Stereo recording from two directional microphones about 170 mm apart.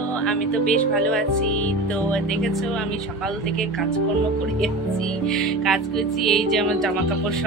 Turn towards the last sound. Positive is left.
turn(degrees=0)  # may be behind; listen again after turning